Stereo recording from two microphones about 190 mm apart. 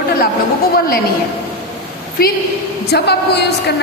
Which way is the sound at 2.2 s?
50° left (ahead or behind).